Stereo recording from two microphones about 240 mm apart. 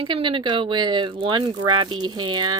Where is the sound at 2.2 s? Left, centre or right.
Right.